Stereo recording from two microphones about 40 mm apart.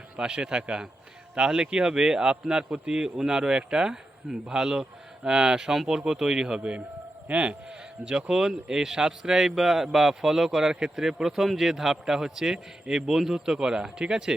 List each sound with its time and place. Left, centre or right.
0.2 s a man's voice: right
6.6 s a man's voice: right
8.0 s a man's voice: centre